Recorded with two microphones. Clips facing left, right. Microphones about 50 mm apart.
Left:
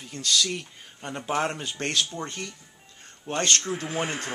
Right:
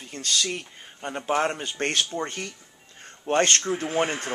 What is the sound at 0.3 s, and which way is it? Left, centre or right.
A man's voice, right.